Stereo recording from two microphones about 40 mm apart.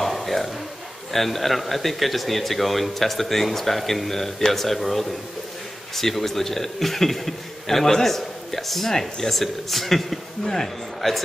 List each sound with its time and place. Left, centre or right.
0.0 s a sound: centre
1.1 s a man's voice: centre
11.0 s speech: centre